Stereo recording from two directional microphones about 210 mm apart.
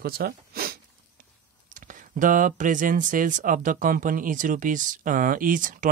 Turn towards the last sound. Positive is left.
turn(degrees=-40)  # may be behind; listen again after turning